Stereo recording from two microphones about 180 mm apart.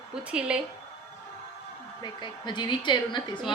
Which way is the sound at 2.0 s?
25° left (ahead or behind).